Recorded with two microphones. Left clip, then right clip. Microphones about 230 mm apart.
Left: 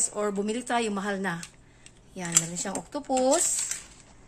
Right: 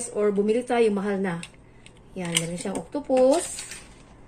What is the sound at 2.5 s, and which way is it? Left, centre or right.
Speech, left.